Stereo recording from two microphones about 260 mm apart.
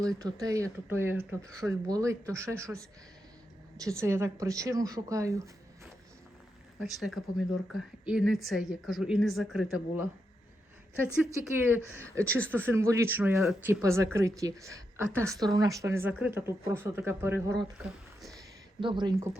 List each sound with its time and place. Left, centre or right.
0.2 s speech: centre
6.7 s a woman's voice: centre
11.2 s speech: centre
17.8 s a sound: centre
18.8 s speech: centre